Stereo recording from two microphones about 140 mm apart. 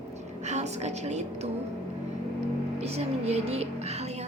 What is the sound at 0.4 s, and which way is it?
A woman's voice, 55° right (ahead or behind).